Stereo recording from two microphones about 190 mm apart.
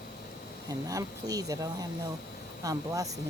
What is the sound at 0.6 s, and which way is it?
Speech, 20° right (ahead or behind).